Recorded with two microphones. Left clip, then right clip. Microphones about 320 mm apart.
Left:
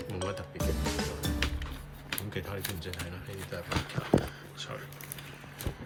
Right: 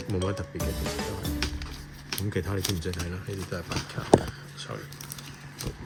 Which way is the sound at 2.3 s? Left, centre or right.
Right.